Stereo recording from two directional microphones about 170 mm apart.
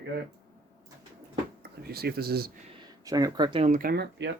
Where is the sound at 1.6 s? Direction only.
70° right (ahead or behind).